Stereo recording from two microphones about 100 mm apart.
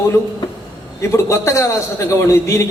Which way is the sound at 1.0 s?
30° left (ahead or behind).